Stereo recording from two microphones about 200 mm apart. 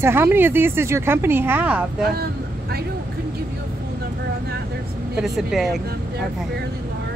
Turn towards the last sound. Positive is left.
turn(degrees=0)  # may be behind; listen again after turning